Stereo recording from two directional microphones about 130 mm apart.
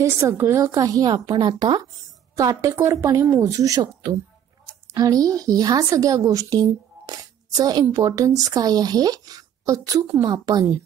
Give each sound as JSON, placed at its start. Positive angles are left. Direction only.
{"t": 0.0, "sound": "a woman's voice", "side_deg": -20}